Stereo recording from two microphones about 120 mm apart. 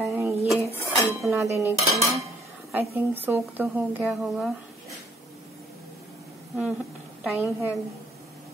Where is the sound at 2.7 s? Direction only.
20° right (ahead or behind).